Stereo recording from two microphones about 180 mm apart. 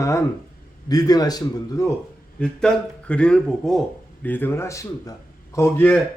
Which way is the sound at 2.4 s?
5° left (ahead or behind).